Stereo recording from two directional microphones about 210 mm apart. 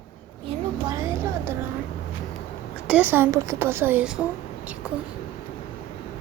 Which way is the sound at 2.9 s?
10° right (ahead or behind).